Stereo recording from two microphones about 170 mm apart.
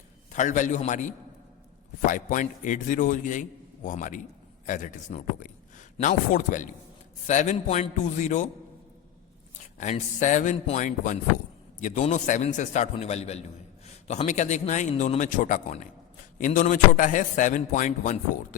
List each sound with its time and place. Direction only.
0.3 s a man's voice: 45° left (ahead or behind)
9.7 s a man's voice: 45° left (ahead or behind)